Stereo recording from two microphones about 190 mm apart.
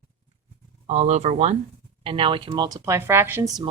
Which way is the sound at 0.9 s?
35° right (ahead or behind).